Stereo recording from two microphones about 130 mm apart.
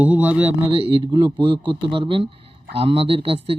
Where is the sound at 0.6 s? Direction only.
40° right (ahead or behind).